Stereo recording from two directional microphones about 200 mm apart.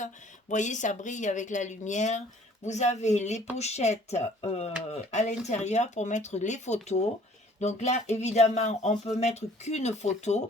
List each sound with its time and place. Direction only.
0.0 s speech: 40° left (ahead or behind)